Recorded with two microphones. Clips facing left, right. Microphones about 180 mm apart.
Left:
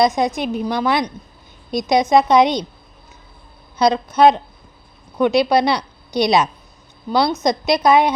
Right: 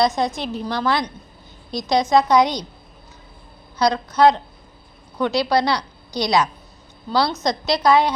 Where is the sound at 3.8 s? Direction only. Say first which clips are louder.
Left 3 dB; 25° left (ahead or behind).